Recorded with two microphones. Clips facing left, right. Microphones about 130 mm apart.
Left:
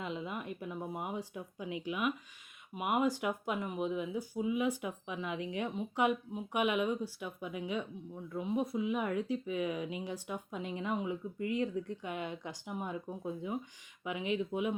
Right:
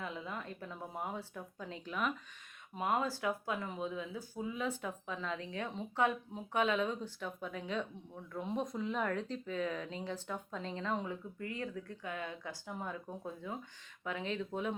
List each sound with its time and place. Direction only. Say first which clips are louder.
0.0 s speech: left 3 dB; 20° left (ahead or behind)